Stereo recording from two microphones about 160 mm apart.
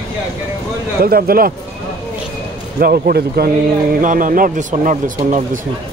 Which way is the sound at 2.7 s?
70° right (ahead or behind).